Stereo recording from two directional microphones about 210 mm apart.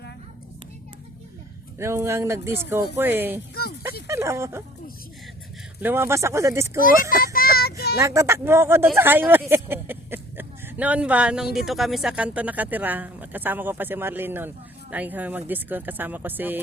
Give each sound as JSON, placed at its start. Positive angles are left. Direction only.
{"t": 1.8, "sound": "speech", "side_deg": -10}
{"t": 5.8, "sound": "speech", "side_deg": -10}
{"t": 7.3, "sound": "child singing", "side_deg": 45}
{"t": 8.0, "sound": "speech", "side_deg": -15}